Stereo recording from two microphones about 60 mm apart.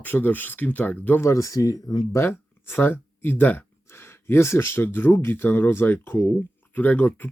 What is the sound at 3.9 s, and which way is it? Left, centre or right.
Speech, left.